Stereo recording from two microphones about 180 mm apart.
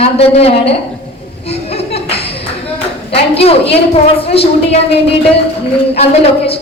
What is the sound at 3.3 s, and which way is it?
A woman's voice, 35° left (ahead or behind).